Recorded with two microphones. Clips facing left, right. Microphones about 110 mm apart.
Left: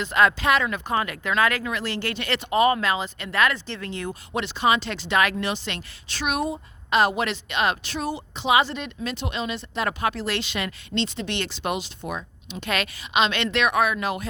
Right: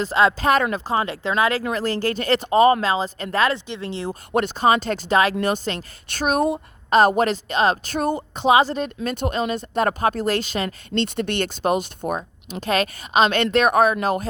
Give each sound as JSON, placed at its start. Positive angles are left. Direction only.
{"t": 0.0, "sound": "speech", "side_deg": -30}
{"t": 0.3, "sound": "speech", "side_deg": -40}
{"t": 1.6, "sound": "speech", "side_deg": -40}
{"t": 4.1, "sound": "speech", "side_deg": -50}
{"t": 7.9, "sound": "speech", "side_deg": -50}